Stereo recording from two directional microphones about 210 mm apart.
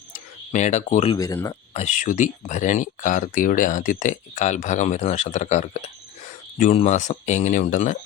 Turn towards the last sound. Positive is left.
turn(degrees=35)  # may be behind; listen again after turning